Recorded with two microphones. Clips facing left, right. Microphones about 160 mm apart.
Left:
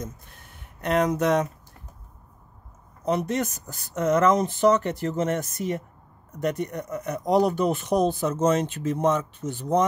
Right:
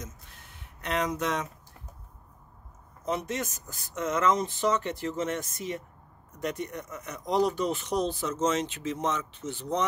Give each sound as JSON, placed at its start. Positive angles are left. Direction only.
{"t": 0.0, "sound": "speech", "side_deg": 50}
{"t": 3.2, "sound": "speech", "side_deg": 60}